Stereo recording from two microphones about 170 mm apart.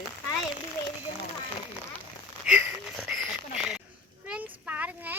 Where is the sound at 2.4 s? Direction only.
10° right (ahead or behind).